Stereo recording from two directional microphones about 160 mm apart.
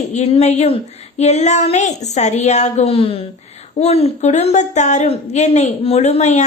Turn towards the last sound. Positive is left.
turn(degrees=45)  # may be behind; listen again after turning